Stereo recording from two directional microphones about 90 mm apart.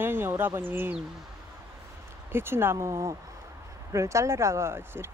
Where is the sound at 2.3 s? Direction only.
25° right (ahead or behind).